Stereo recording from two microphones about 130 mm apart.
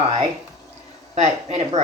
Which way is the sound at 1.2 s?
60° right (ahead or behind).